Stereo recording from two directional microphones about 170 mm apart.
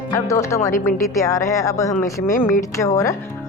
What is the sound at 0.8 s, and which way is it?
Speech, 50° left (ahead or behind).